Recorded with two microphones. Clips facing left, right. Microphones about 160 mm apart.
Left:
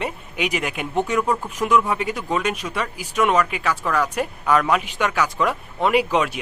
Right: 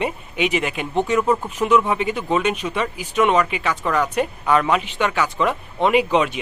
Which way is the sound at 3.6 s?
5° left (ahead or behind).